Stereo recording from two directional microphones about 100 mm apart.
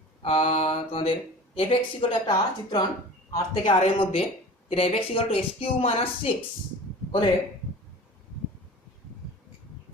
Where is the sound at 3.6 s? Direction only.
70° left (ahead or behind); by 6.3 s 90° left.